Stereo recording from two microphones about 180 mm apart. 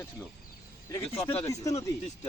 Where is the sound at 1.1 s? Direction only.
35° left (ahead or behind).